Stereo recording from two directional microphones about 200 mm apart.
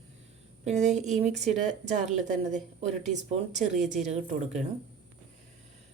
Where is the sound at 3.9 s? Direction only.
35° right (ahead or behind).